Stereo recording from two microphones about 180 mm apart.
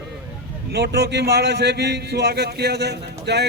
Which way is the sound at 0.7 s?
65° right (ahead or behind).